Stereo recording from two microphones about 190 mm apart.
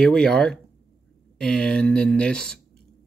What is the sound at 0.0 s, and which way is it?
Speech, 5° left (ahead or behind).